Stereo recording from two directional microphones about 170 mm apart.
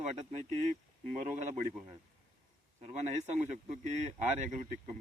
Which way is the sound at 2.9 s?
45° right (ahead or behind).